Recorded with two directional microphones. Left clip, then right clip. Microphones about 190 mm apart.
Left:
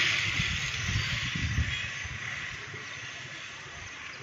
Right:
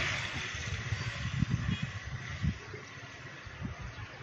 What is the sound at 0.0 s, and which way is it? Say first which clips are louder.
Vehicle: left 8 dB; 50° right (ahead or behind).